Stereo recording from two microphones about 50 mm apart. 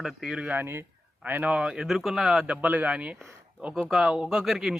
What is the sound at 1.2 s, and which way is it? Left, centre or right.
Speech, right.